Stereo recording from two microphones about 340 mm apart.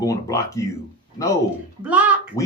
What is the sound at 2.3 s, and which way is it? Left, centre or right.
Speech, centre.